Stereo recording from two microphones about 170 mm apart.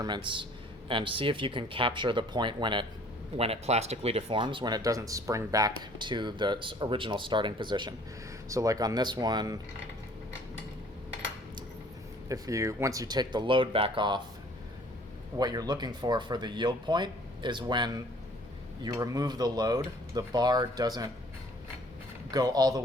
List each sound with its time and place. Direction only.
0.0 s speech: 25° right (ahead or behind)
12.3 s speech: 20° right (ahead or behind)
15.4 s speech: 25° right (ahead or behind)
22.3 s speech: 20° right (ahead or behind)